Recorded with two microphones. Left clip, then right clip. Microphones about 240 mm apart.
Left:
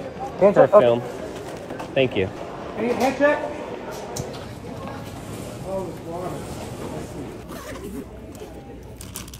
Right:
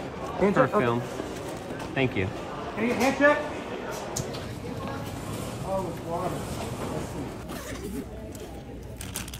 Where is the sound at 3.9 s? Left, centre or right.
Centre.